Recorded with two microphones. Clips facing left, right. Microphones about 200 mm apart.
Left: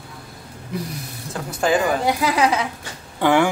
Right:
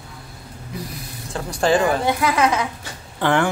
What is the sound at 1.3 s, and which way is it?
Speech, 5° left (ahead or behind).